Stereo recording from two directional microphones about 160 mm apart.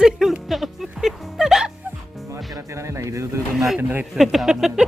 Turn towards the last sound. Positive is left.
turn(degrees=0)  # may be behind; listen again after turning